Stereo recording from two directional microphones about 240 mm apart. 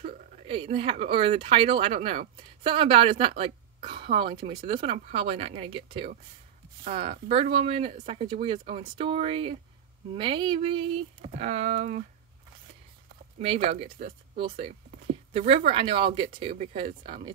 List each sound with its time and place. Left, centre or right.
0.0 s a woman's voice: right
13.4 s speech: right
13.9 s speech: right
15.3 s speech: right